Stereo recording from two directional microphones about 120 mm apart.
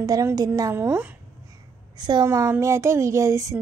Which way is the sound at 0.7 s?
15° right (ahead or behind).